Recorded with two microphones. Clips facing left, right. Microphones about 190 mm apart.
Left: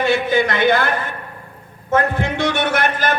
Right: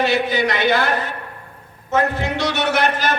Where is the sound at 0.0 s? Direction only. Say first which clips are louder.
Left 2 dB; 50° left (ahead or behind).